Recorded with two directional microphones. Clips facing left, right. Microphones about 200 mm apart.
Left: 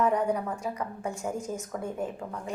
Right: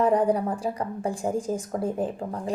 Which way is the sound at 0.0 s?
30° right (ahead or behind).